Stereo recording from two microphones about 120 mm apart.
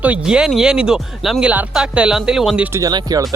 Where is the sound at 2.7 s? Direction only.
30° right (ahead or behind).